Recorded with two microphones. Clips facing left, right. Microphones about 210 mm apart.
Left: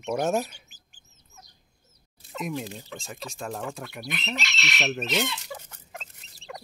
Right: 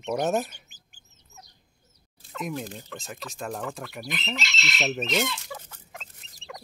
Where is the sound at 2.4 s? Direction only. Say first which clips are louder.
Left 1 dB; centre (ahead or behind).